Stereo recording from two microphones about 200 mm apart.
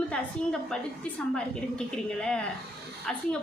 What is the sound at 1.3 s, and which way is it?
A woman's voice, 5° left (ahead or behind).